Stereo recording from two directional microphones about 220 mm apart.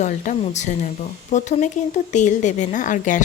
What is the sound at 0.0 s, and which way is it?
Speech, 35° left (ahead or behind).